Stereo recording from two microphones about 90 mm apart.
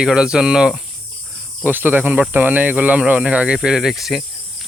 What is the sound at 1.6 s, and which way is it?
Speech, 20° right (ahead or behind).